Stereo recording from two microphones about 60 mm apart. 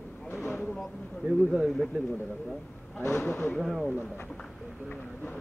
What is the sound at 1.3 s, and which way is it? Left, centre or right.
Speech, centre.